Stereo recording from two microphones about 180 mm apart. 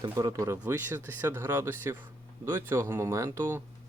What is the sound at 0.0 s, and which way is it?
Speech, 20° right (ahead or behind).